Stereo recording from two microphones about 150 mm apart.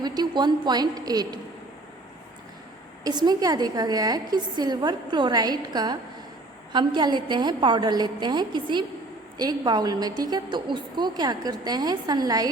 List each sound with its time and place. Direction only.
0.0 s a woman's voice: 30° right (ahead or behind)
3.0 s a woman's voice: 30° right (ahead or behind)